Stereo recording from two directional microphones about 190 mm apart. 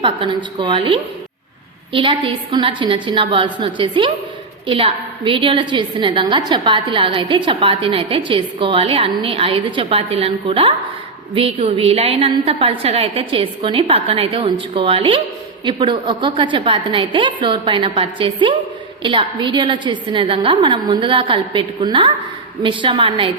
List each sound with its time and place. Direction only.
0.0 s a woman's voice: 25° right (ahead or behind)